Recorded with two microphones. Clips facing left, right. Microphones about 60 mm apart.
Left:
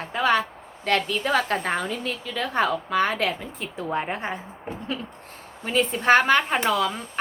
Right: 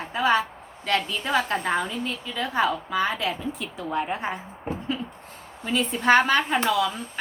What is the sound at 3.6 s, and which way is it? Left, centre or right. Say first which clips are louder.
Speech: left 2 dB; left.